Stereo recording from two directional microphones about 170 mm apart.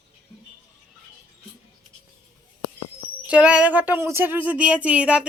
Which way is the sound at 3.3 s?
5° right (ahead or behind).